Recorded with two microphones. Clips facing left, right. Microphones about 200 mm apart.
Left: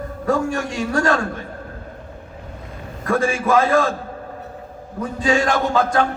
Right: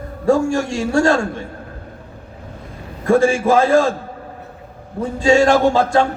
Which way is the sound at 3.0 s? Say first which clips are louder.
Right 6 dB; 25° right (ahead or behind).